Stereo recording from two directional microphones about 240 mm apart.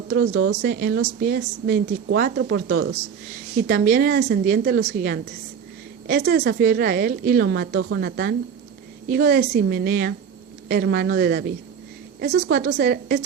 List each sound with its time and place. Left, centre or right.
0.1 s speech: right
0.6 s a woman's voice: right
12.5 s a woman's voice: right